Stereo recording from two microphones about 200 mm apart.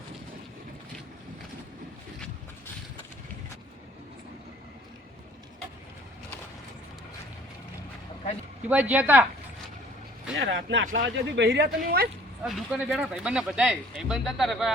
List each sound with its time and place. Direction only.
8.7 s speech: 10° right (ahead or behind)
10.3 s speech: 70° right (ahead or behind); by 12.0 s 50° right (ahead or behind)
12.4 s speech: 5° right (ahead or behind)